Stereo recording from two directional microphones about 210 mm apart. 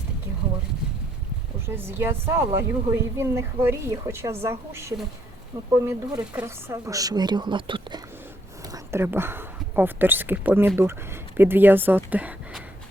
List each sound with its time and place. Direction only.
1.6 s speech: 10° right (ahead or behind)